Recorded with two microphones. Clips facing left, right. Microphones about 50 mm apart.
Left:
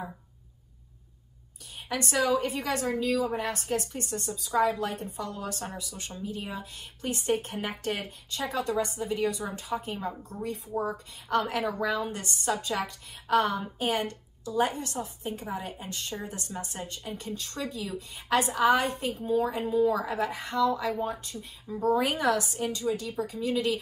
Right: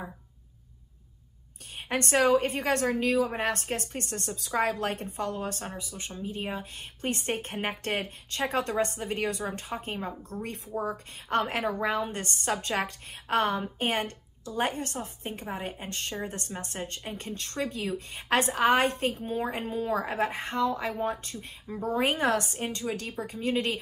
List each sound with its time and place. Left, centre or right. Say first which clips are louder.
1.9 s a woman's voice: right 3 dB; right
21.8 s a woman's voice: left 1 dB; right